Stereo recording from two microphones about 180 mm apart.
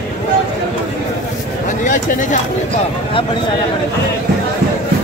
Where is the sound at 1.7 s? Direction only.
45° left (ahead or behind).